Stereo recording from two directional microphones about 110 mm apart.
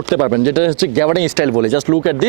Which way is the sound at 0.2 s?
20° right (ahead or behind).